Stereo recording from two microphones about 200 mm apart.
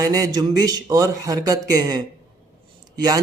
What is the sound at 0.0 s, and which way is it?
Speech, 20° right (ahead or behind).